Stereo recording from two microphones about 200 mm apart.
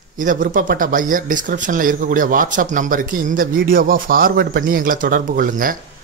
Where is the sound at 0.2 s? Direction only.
40° right (ahead or behind).